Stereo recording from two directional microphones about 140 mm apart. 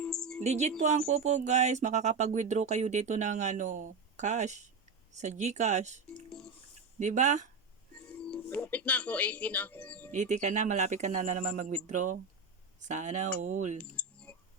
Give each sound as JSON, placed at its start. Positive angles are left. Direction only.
{"t": 0.0, "sound": "music", "side_deg": 5}
{"t": 0.4, "sound": "speech", "side_deg": -50}
{"t": 8.2, "sound": "speech", "side_deg": 10}
{"t": 10.1, "sound": "speech", "side_deg": -60}
{"t": 13.7, "sound": "a sound", "side_deg": 10}